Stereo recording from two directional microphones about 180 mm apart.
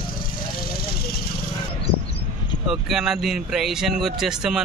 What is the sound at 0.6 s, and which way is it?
Vehicle, 55° left (ahead or behind).